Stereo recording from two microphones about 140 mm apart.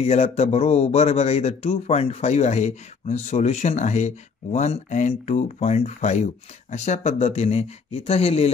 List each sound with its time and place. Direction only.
0.0 s speech: 50° left (ahead or behind)